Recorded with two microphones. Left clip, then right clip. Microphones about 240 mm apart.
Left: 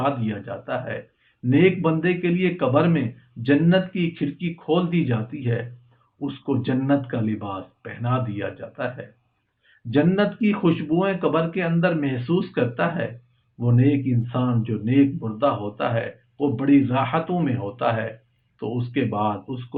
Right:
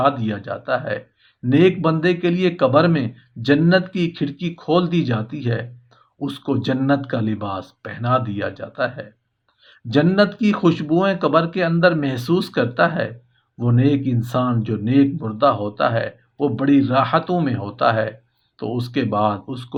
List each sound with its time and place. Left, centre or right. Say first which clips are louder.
0.0 s speech: right 6 dB; right